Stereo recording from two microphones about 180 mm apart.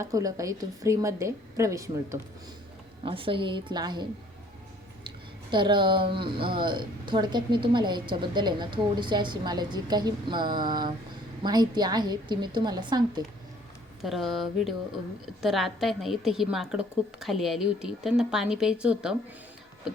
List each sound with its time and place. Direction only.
0.0 s a woman's voice: 20° right (ahead or behind)
3.0 s speech: 30° right (ahead or behind)
5.0 s a sound: 25° right (ahead or behind)
6.1 s speech: 30° right (ahead or behind)
14.0 s a woman's voice: centre (ahead or behind)